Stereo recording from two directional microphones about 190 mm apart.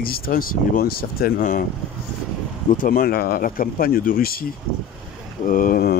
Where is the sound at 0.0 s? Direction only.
50° left (ahead or behind).